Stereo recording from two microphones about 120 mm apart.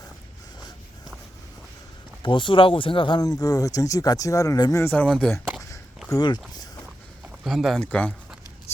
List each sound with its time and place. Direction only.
2.2 s speech: 40° left (ahead or behind); by 4.9 s 25° left (ahead or behind)
4.9 s speech: 5° left (ahead or behind)
6.1 s speech: 35° left (ahead or behind)
6.5 s a sound: 35° left (ahead or behind)
7.4 s speech: centre (ahead or behind)
7.8 s speech: 10° left (ahead or behind)